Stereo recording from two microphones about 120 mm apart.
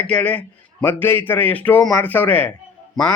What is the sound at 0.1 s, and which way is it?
A man's voice, 10° left (ahead or behind).